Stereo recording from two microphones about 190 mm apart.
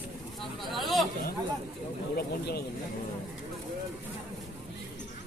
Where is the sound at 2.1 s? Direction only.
55° left (ahead or behind).